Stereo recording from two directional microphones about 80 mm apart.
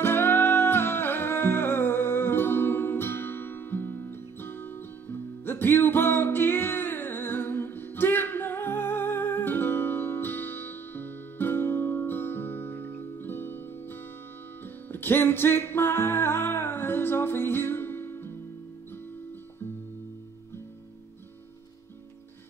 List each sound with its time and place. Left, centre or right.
0.0 s music: left